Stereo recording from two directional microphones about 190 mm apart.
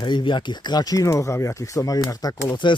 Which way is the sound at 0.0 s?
25° left (ahead or behind).